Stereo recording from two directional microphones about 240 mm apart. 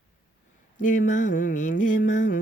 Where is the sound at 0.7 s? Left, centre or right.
Left.